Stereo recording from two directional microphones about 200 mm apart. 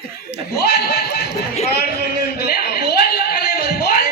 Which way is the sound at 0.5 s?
55° left (ahead or behind).